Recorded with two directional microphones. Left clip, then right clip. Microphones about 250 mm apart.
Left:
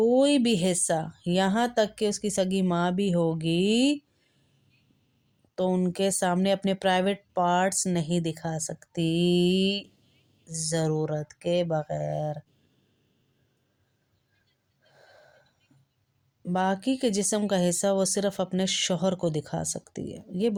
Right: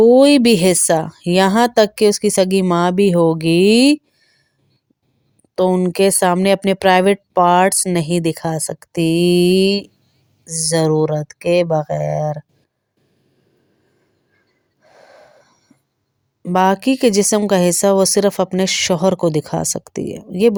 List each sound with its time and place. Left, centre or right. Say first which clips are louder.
0.0 s speech: right 12 dB; right
5.5 s speech: right 12 dB; right
14.8 s wheeze: right 11 dB; right
16.4 s speech: right 13 dB; right